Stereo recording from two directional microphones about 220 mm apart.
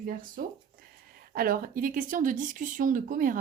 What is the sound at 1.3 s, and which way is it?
Speech, 40° right (ahead or behind).